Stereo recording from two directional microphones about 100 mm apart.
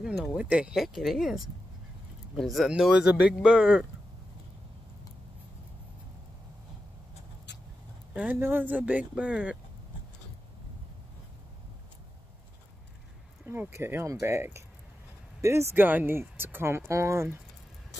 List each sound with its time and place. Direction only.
0.0 s a sound: 5° right (ahead or behind)
0.8 s speech: centre (ahead or behind)
8.1 s speech: 15° right (ahead or behind)
13.5 s speech: 25° right (ahead or behind)